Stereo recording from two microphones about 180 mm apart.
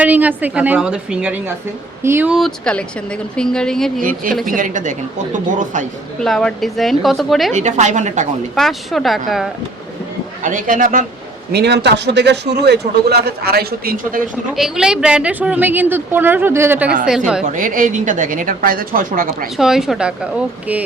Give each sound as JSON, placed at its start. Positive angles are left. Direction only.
{"t": 0.0, "sound": "a woman's voice", "side_deg": -10}
{"t": 2.3, "sound": "a woman's voice", "side_deg": 5}
{"t": 4.0, "sound": "speech", "side_deg": -50}
{"t": 6.1, "sound": "a woman's voice", "side_deg": 5}
{"t": 7.5, "sound": "a woman's voice", "side_deg": -40}
{"t": 8.5, "sound": "a woman's voice", "side_deg": 0}
{"t": 10.4, "sound": "speech", "side_deg": -50}
{"t": 11.5, "sound": "a man's voice", "side_deg": -70}
{"t": 14.5, "sound": "a woman's voice", "side_deg": 0}
{"t": 17.4, "sound": "speech", "side_deg": -45}
{"t": 19.5, "sound": "a woman's voice", "side_deg": -5}